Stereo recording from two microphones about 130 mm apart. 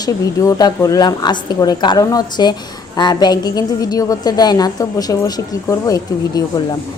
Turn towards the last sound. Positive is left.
turn(degrees=30)  # may be behind; listen again after turning